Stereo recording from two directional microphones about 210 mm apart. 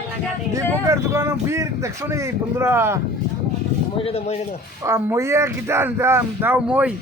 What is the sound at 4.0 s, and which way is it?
Speech, 30° left (ahead or behind).